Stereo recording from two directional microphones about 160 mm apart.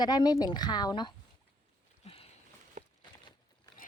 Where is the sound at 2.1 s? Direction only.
40° left (ahead or behind).